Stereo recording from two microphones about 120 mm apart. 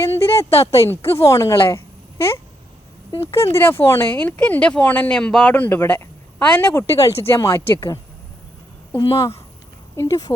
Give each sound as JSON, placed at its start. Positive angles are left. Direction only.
{"t": 0.0, "sound": "a woman's voice", "side_deg": 20}
{"t": 0.5, "sound": "speech", "side_deg": 60}
{"t": 0.9, "sound": "a woman's voice", "side_deg": 20}
{"t": 9.9, "sound": "speech", "side_deg": 30}